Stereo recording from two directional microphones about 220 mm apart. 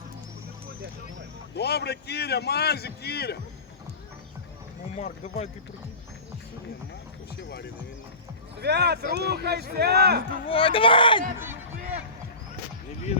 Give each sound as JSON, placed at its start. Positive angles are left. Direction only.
{"t": 1.5, "sound": "a man's voice", "side_deg": 50}
{"t": 4.9, "sound": "speech", "side_deg": 30}
{"t": 7.3, "sound": "a man's voice", "side_deg": 50}
{"t": 8.6, "sound": "speech", "side_deg": -50}
{"t": 10.4, "sound": "speech", "side_deg": 25}